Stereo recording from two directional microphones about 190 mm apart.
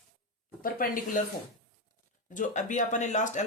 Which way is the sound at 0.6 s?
45° left (ahead or behind).